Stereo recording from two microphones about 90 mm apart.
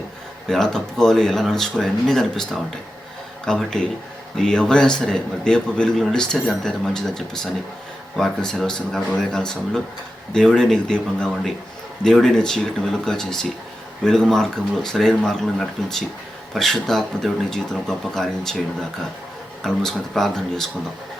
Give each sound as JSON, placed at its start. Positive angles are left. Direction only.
{"t": 0.4, "sound": "a man's voice", "side_deg": 5}
{"t": 19.6, "sound": "speech", "side_deg": 5}